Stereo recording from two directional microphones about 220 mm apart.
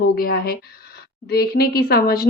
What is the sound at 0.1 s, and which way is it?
A woman's voice, 40° left (ahead or behind).